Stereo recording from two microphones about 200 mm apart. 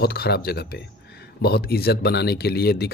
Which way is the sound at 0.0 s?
50° left (ahead or behind).